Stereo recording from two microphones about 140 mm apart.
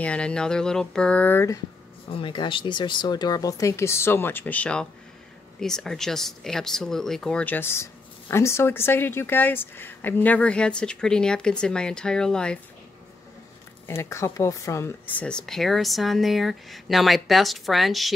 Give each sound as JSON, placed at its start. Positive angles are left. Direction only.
{"t": 0.0, "sound": "speech", "side_deg": 5}
{"t": 2.1, "sound": "speech", "side_deg": 35}
{"t": 13.8, "sound": "speech", "side_deg": 20}